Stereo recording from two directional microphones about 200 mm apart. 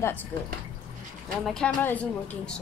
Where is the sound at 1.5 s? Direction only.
5° left (ahead or behind).